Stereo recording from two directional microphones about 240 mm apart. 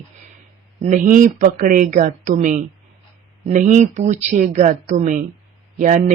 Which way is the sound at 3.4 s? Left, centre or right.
Right.